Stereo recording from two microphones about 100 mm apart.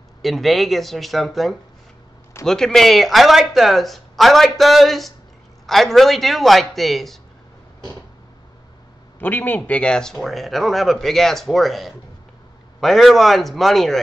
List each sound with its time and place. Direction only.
0.2 s speech: centre (ahead or behind)
9.2 s a man's voice: 20° left (ahead or behind); by 13.9 s centre (ahead or behind)